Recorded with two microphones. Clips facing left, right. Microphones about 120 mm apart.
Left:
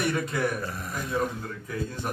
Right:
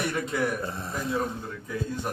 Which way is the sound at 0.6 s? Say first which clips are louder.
Right 2 dB; 25° right (ahead or behind).